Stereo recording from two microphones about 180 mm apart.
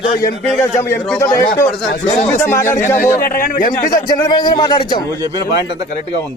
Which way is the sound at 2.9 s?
50° left (ahead or behind).